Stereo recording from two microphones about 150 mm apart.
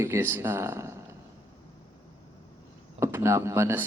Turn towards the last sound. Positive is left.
turn(degrees=-20)  # may be behind; listen again after turning